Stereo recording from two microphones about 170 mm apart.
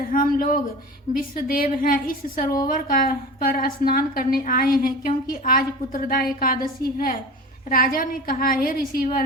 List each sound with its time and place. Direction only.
0.1 s a woman's voice: 55° left (ahead or behind)
7.7 s a woman's voice: 55° left (ahead or behind)